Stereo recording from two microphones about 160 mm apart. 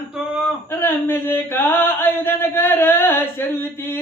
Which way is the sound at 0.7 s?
15° left (ahead or behind).